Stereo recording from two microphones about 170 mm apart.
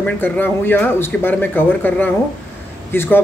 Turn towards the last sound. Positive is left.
turn(degrees=10)  # may be behind; listen again after turning